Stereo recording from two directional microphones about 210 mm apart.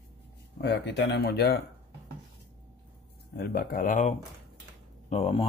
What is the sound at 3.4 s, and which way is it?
Speech, 45° left (ahead or behind).